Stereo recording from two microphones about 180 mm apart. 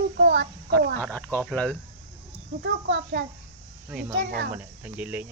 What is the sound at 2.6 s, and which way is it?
Speech, 90° right.